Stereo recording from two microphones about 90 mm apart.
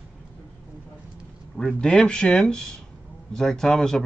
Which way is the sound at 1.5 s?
5° left (ahead or behind).